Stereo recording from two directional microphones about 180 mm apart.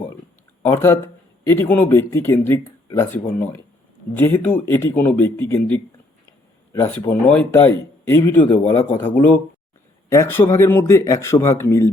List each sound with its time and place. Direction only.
0.6 s speech: 15° left (ahead or behind)